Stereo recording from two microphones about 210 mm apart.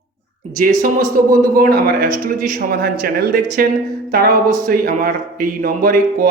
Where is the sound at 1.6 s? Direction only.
45° right (ahead or behind).